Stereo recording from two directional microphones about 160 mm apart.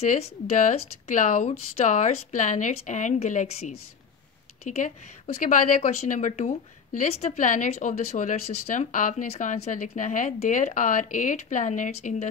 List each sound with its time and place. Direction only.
0.0 s speech: 45° left (ahead or behind)